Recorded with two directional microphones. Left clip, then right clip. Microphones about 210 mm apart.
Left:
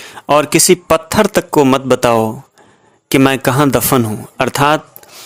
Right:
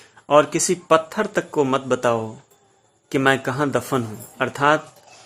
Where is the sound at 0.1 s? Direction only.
40° left (ahead or behind).